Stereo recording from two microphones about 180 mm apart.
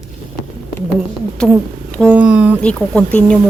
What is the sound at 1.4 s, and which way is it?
Speech, 5° left (ahead or behind).